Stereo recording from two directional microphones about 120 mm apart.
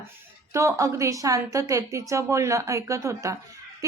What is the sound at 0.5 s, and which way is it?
A woman's voice, 25° right (ahead or behind).